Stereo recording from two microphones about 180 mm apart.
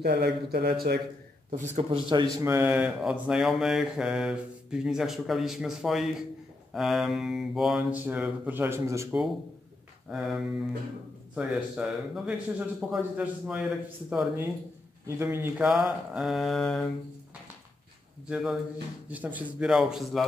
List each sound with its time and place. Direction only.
0.0 s speech: 60° right (ahead or behind)
1.5 s speech: 35° right (ahead or behind)
2.4 s mantra: 15° right (ahead or behind)
10.0 s mantra: centre (ahead or behind)
18.3 s mantra: centre (ahead or behind)